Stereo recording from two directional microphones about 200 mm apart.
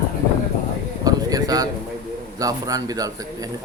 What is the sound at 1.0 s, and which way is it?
A man's voice, 20° right (ahead or behind).